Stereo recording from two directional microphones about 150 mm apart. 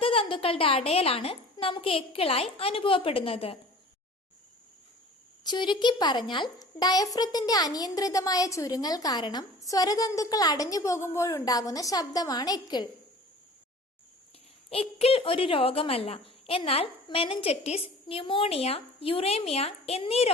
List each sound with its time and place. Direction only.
0.0 s a woman's voice: 35° left (ahead or behind)
5.4 s a woman's voice: 30° left (ahead or behind)
14.7 s a woman's voice: 40° left (ahead or behind)